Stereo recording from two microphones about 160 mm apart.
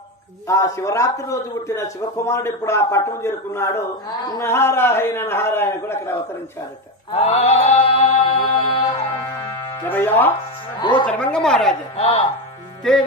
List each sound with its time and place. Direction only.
0.5 s a man's voice: 20° left (ahead or behind)
7.1 s mantra: 40° left (ahead or behind)
9.8 s a man's voice: 10° left (ahead or behind)
10.8 s speech: 30° left (ahead or behind)
11.1 s speech: 5° left (ahead or behind)
12.0 s mantra: 40° left (ahead or behind)